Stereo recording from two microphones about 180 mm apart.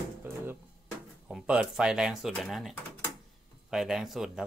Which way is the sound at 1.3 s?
5° right (ahead or behind).